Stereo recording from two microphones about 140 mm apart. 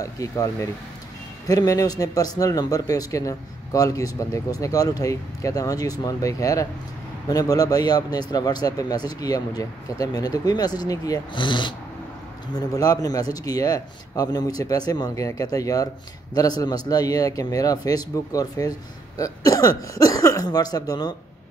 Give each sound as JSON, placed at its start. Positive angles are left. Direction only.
{"t": 0.0, "sound": "speech", "side_deg": 25}